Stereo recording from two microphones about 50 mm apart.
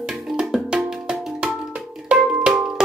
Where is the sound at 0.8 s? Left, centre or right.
Centre.